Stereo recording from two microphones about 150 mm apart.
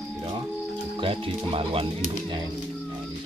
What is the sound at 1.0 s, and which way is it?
Speech, 40° right (ahead or behind).